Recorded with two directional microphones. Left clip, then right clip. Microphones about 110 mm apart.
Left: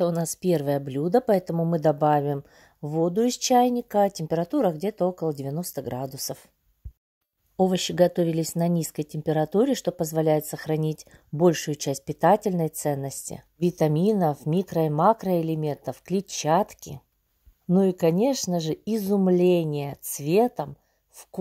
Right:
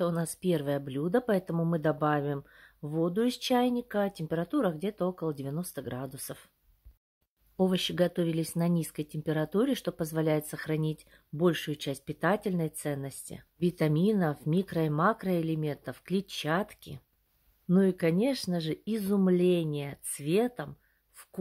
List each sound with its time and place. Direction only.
0.0 s speech: 35° left (ahead or behind)
7.5 s speech: 30° left (ahead or behind)
13.7 s a woman's voice: 30° left (ahead or behind)